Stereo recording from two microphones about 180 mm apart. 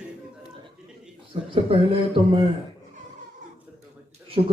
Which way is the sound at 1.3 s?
30° right (ahead or behind).